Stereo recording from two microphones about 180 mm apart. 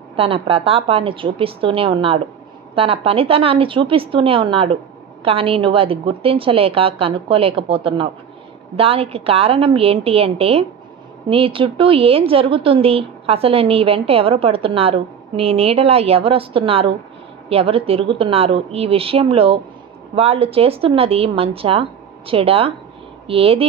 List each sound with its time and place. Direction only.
0.1 s a woman's voice: 30° right (ahead or behind)